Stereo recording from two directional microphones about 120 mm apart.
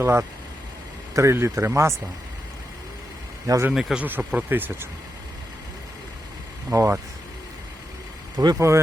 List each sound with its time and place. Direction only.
0.0 s speech: 20° right (ahead or behind)
3.4 s speech: 30° right (ahead or behind)
3.7 s speech: 5° right (ahead or behind)
6.7 s speech: 20° right (ahead or behind)
8.4 s speech: 30° right (ahead or behind)